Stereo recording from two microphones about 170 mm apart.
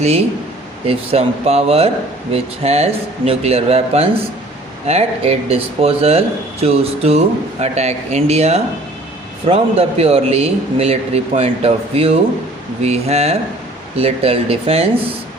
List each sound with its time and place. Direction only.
0.0 s a man's voice: 35° right (ahead or behind)